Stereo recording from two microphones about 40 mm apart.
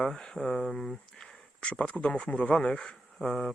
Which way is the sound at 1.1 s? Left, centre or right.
Centre.